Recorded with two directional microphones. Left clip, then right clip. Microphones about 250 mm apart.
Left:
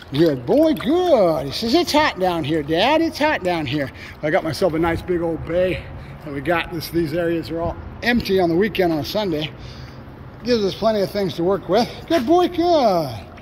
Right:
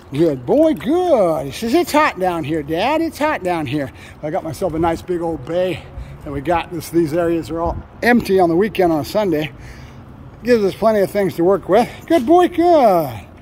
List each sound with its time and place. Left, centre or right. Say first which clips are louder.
0.1 s speech: right 1 dB; centre